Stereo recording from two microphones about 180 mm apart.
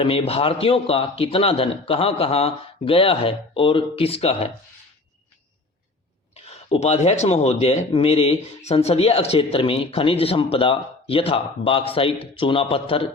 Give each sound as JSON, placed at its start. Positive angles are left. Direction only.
{"t": 0.0, "sound": "speech", "side_deg": 30}
{"t": 6.3, "sound": "speech", "side_deg": 35}